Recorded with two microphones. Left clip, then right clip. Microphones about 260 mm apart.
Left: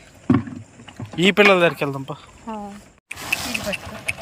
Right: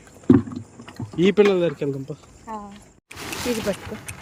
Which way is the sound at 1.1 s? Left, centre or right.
Centre.